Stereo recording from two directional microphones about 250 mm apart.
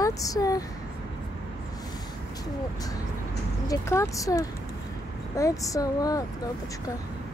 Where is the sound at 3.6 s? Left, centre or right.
Centre.